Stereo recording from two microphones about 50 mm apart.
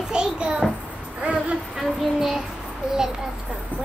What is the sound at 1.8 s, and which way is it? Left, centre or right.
Speech, centre.